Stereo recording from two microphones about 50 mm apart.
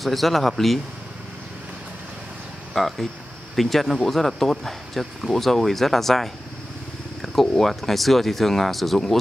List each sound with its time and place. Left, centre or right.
0.0 s speech: centre
2.7 s speech: centre